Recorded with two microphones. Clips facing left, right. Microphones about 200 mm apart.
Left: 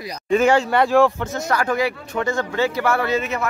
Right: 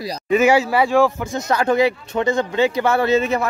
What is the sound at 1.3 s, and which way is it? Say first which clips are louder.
Speech: right 7 dB; 20° right (ahead or behind).